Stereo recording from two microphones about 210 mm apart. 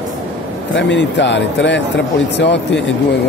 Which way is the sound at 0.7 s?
60° left (ahead or behind).